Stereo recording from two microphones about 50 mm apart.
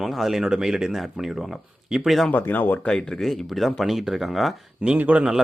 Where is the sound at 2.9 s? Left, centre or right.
Centre.